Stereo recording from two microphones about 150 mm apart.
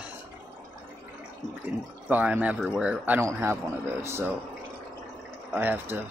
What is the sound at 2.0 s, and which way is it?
Speech, 10° right (ahead or behind).